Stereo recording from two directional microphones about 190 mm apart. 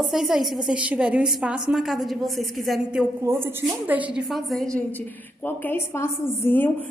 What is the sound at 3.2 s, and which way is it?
A woman's voice, 15° right (ahead or behind).